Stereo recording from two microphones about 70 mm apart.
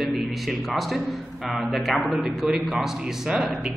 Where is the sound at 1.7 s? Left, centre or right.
Centre.